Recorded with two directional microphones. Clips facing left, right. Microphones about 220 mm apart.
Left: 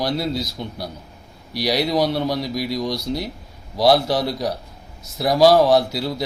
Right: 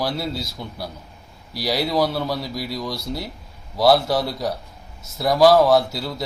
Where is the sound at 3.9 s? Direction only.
Centre (ahead or behind).